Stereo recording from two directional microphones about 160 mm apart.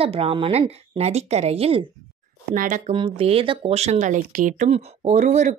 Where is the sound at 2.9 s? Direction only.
35° right (ahead or behind).